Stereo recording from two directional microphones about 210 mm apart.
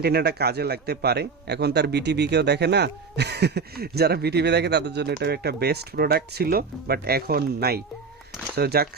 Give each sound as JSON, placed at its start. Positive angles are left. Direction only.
{"t": 0.0, "sound": "a man's voice", "side_deg": -50}